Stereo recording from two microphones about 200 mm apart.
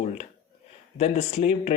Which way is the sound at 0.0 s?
35° left (ahead or behind).